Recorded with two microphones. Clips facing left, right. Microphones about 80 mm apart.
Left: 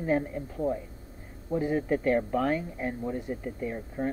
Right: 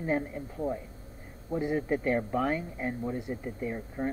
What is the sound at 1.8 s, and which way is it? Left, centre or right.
Speech, centre.